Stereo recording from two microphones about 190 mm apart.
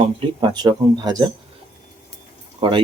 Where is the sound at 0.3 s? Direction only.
20° right (ahead or behind).